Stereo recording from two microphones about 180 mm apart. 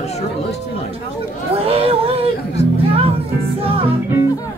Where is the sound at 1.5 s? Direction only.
35° right (ahead or behind).